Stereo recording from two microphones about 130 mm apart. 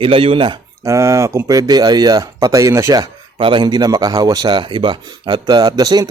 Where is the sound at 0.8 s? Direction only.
25° right (ahead or behind).